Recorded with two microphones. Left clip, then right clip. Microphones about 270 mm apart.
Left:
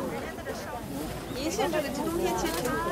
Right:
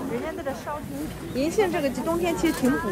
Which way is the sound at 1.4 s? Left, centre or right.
Right.